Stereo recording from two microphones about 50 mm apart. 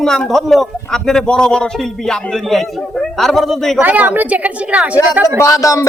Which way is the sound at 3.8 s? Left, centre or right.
Right.